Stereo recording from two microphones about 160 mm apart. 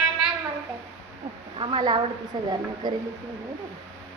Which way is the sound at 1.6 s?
30° right (ahead or behind).